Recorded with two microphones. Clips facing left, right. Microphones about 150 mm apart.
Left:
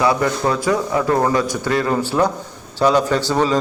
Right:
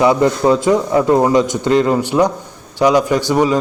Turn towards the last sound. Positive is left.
turn(degrees=-15)  # may be behind; listen again after turning